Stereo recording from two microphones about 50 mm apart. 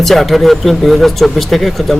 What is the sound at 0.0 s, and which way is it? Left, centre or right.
Speech, centre.